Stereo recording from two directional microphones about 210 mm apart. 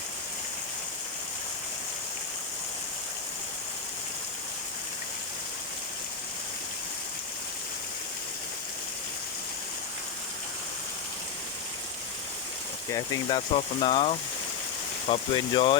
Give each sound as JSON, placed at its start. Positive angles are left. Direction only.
{"t": 12.9, "sound": "speech", "side_deg": 25}